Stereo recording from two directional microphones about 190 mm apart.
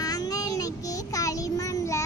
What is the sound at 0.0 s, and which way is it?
Child singing, 20° left (ahead or behind).